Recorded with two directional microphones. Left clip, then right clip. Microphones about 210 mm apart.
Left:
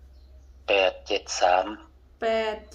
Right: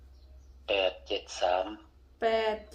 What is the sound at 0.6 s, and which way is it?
Speech, 50° left (ahead or behind).